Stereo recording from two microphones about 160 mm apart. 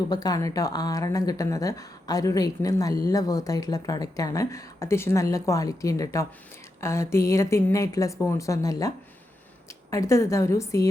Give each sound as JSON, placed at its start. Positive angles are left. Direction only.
{"t": 0.1, "sound": "speech", "side_deg": 25}
{"t": 9.9, "sound": "speech", "side_deg": 20}